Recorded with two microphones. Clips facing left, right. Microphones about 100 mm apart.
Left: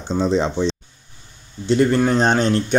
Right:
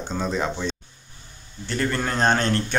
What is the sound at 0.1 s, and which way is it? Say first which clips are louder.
Speech: left 8 dB; 25° left (ahead or behind).